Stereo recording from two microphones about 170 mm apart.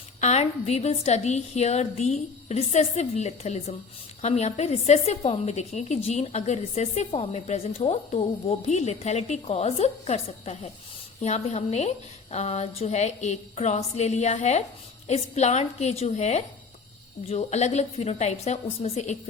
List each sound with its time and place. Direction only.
0.2 s a woman's voice: 40° left (ahead or behind)